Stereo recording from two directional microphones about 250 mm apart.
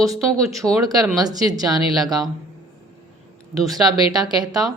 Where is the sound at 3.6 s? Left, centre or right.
Centre.